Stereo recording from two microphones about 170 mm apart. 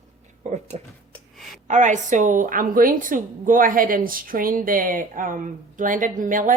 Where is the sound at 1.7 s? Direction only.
45° right (ahead or behind).